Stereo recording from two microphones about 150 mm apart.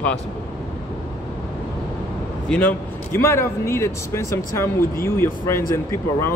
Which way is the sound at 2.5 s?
15° left (ahead or behind).